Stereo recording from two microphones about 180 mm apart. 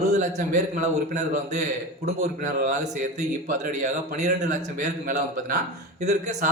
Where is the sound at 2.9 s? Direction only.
45° right (ahead or behind).